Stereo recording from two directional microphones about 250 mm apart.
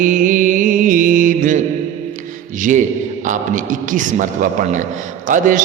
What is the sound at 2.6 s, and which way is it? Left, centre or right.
A man's voice, right.